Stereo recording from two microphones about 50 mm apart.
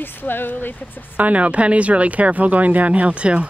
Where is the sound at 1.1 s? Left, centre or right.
Right.